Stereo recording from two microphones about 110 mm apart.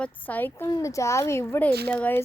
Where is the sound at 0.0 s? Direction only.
15° left (ahead or behind).